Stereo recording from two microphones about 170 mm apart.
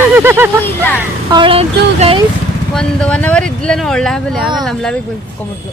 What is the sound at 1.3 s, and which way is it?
Speech, 30° right (ahead or behind).